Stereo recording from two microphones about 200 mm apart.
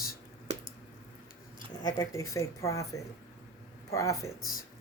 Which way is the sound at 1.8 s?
15° left (ahead or behind).